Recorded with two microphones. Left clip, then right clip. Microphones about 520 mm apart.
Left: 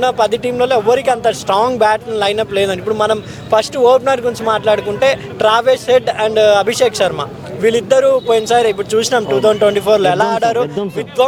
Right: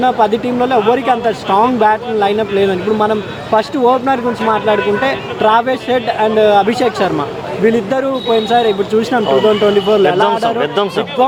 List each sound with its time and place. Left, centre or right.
0.0 s a man's voice: left